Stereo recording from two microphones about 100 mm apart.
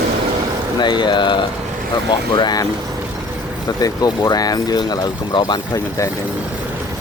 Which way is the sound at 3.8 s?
40° left (ahead or behind).